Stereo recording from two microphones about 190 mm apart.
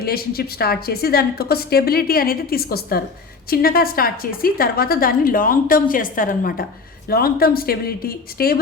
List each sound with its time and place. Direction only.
0.0 s a woman's voice: 55° left (ahead or behind)